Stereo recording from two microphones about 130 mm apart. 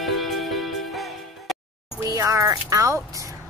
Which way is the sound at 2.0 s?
25° right (ahead or behind).